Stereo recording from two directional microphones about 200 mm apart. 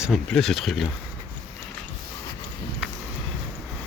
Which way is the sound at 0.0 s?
Centre (ahead or behind).